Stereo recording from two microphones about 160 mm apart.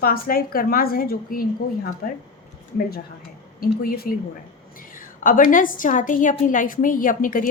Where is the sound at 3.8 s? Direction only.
65° left (ahead or behind).